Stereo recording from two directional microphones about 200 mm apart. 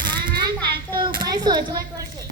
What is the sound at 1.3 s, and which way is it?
Speech, 20° right (ahead or behind).